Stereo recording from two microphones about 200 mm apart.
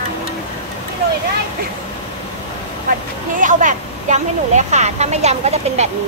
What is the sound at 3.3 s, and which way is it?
Speech, 40° right (ahead or behind).